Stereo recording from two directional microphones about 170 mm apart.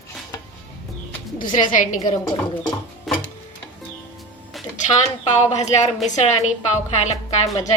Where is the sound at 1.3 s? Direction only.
55° left (ahead or behind).